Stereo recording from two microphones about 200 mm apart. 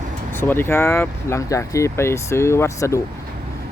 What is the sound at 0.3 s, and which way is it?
Speech, 10° left (ahead or behind).